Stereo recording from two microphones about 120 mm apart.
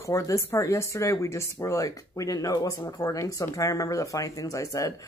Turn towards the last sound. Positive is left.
turn(degrees=25)  # may be behind; listen again after turning